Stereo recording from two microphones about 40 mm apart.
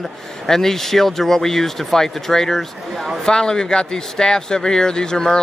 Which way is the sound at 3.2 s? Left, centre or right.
Centre.